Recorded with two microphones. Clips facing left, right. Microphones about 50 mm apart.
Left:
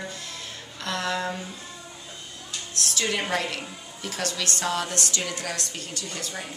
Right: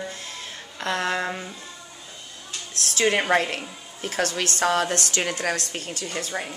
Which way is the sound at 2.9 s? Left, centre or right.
Right.